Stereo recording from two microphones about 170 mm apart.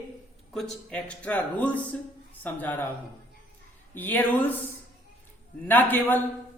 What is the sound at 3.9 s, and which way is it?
Speech, 10° left (ahead or behind).